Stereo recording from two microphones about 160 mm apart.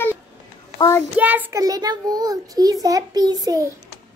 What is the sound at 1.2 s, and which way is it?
A child's voice, 10° right (ahead or behind).